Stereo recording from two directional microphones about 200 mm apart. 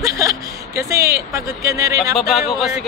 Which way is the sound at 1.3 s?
15° right (ahead or behind).